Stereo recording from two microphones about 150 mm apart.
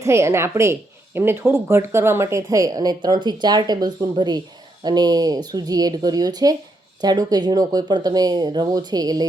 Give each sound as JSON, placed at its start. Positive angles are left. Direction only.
{"t": 0.0, "sound": "a woman's voice", "side_deg": -20}